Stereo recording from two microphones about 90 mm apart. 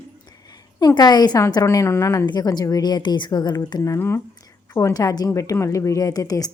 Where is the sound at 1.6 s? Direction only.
35° left (ahead or behind).